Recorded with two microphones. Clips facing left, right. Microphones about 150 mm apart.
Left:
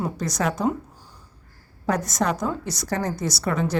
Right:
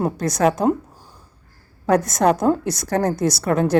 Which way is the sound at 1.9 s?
55° right (ahead or behind).